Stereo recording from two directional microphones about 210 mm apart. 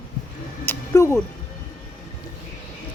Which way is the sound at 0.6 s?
10° left (ahead or behind).